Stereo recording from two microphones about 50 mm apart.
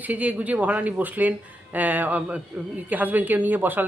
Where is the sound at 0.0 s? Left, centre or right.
Right.